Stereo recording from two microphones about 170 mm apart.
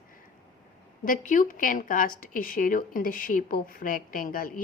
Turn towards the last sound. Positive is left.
turn(degrees=55)  # may be behind; listen again after turning